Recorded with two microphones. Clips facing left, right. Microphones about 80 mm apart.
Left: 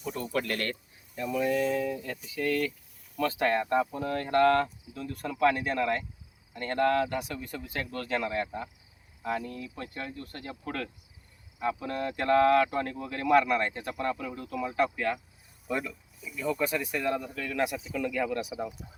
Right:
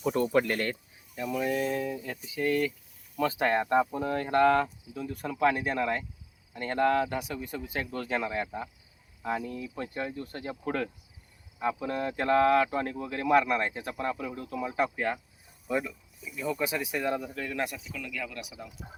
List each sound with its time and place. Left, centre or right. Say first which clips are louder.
0.0 s speech: right 8 dB; right
0.4 s speech: right 2 dB; centre
14.9 s speech: even; right
15.7 s speech: right 2 dB; centre
18.0 s speech: left 9 dB; left